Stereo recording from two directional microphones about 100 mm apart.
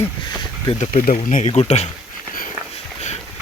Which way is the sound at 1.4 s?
90° left.